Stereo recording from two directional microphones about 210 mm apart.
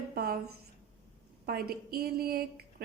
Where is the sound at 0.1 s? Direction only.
45° right (ahead or behind).